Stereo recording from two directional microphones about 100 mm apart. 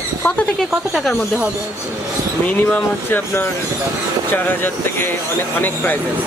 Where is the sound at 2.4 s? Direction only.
20° left (ahead or behind).